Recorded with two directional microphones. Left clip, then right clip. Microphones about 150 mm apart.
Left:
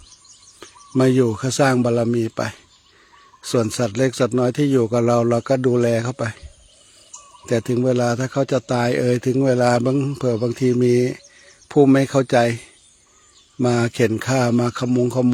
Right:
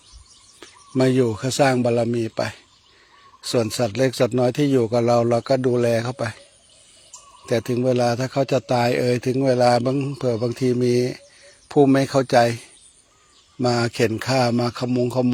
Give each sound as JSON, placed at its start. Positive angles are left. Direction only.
{"t": 0.6, "sound": "speech", "side_deg": 40}
{"t": 7.4, "sound": "speech", "side_deg": 40}